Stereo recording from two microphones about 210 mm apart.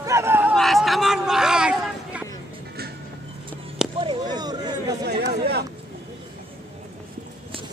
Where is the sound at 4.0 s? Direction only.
20° right (ahead or behind).